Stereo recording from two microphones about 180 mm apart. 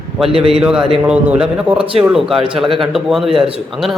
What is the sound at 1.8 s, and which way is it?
Speech, 30° right (ahead or behind).